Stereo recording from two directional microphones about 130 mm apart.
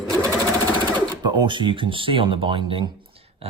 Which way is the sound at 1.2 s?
35° right (ahead or behind).